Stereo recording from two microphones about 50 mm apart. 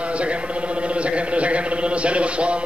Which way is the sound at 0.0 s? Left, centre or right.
Right.